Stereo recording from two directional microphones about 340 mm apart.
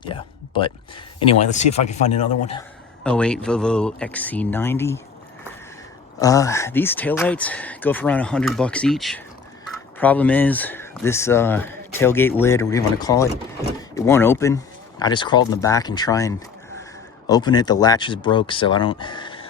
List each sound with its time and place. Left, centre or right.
0.0 s a sound: centre
1.2 s speech: centre
3.0 s speech: centre
6.1 s speech: centre